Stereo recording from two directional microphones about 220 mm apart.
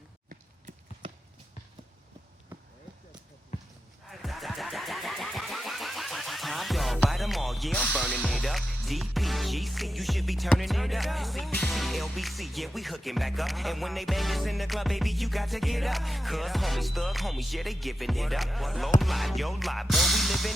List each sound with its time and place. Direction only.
4.1 s vehicle: centre (ahead or behind)
18.9 s music: centre (ahead or behind)